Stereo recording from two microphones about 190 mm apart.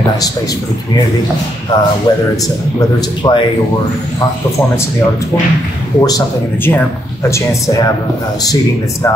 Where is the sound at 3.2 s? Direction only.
25° left (ahead or behind).